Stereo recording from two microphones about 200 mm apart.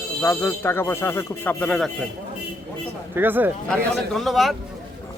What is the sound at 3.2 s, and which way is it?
Speech, 10° right (ahead or behind).